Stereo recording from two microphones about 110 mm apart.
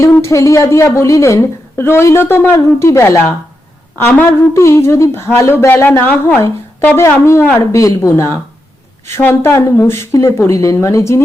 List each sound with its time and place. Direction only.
0.0 s a woman's voice: 25° left (ahead or behind)